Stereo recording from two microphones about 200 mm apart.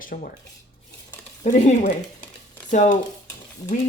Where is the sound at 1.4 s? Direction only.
40° left (ahead or behind).